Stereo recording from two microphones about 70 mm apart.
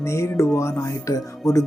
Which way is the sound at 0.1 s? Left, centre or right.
Left.